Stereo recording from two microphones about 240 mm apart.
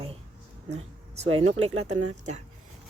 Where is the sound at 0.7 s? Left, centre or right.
Right.